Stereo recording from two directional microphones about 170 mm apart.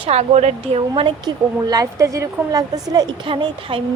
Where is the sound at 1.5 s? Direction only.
20° right (ahead or behind).